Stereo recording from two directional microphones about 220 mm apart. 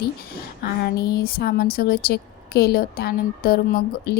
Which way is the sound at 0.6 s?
45° left (ahead or behind).